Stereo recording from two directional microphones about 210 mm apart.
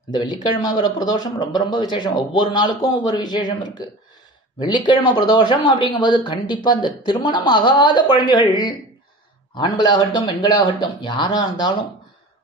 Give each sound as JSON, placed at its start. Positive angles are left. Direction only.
{"t": 0.1, "sound": "speech", "side_deg": 20}